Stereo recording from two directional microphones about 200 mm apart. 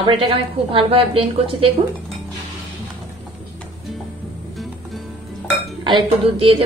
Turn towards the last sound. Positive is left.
turn(degrees=-25)  # may be behind; listen again after turning